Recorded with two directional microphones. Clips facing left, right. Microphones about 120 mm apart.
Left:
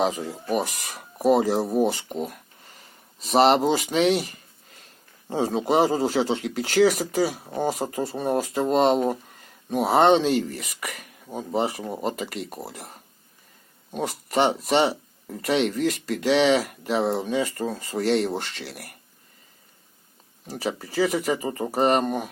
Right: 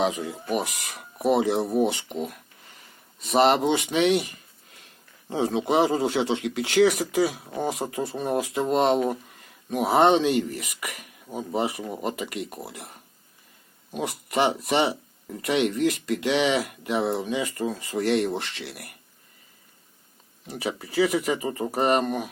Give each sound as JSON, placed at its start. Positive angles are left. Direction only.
{"t": 0.6, "sound": "speech", "side_deg": 0}
{"t": 2.6, "sound": "a sound", "side_deg": 0}
{"t": 3.8, "sound": "speech", "side_deg": 0}
{"t": 5.3, "sound": "speech", "side_deg": 0}
{"t": 10.6, "sound": "speech", "side_deg": 35}
{"t": 11.3, "sound": "speech", "side_deg": 0}
{"t": 11.9, "sound": "speech", "side_deg": 30}
{"t": 12.7, "sound": "speech", "side_deg": 0}
{"t": 20.5, "sound": "speech", "side_deg": 0}